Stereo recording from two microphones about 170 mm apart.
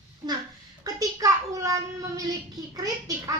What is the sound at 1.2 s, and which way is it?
Child singing, 20° right (ahead or behind).